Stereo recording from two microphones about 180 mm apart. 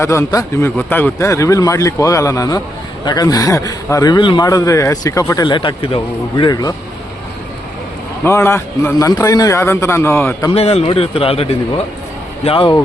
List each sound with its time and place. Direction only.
0.0 s a man's voice: 15° left (ahead or behind)
8.2 s a man's voice: 15° left (ahead or behind)
10.5 s a man's voice: 35° left (ahead or behind)